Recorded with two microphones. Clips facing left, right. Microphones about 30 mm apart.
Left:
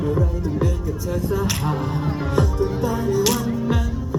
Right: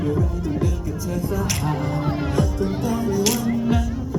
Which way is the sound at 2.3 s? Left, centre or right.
Centre.